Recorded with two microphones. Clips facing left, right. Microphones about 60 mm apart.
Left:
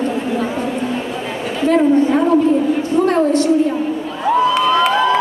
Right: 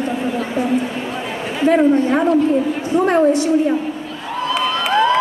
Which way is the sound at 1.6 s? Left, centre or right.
Centre.